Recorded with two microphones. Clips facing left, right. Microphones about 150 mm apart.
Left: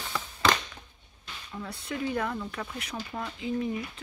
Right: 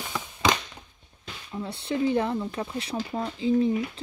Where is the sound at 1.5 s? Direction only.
25° right (ahead or behind).